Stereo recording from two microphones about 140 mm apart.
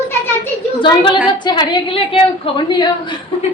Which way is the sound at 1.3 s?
30° left (ahead or behind).